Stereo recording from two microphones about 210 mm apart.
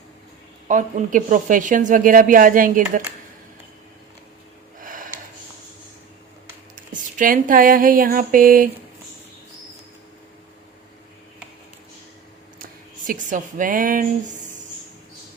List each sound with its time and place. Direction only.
0.7 s speech: 35° right (ahead or behind)
4.8 s a sound: 40° right (ahead or behind)
7.2 s speech: 40° right (ahead or behind)
13.1 s speech: 40° right (ahead or behind)